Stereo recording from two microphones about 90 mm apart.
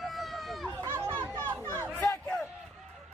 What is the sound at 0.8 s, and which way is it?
Chatter, 25° right (ahead or behind).